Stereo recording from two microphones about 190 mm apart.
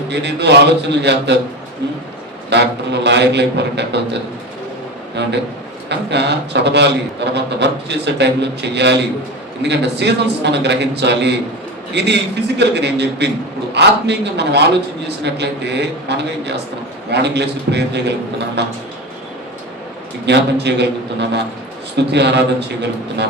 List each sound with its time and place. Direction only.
0.1 s a man's voice: 65° right (ahead or behind)
2.5 s a man's voice: 65° right (ahead or behind)
5.2 s a man's voice: 65° right (ahead or behind)
20.2 s a man's voice: 65° right (ahead or behind)